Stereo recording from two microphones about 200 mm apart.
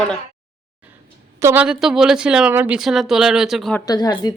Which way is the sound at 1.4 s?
10° right (ahead or behind).